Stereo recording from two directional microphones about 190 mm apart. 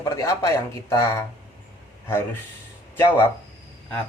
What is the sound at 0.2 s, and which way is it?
Speech, 15° left (ahead or behind).